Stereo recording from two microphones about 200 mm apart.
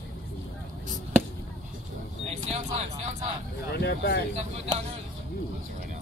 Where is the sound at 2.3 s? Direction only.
35° right (ahead or behind).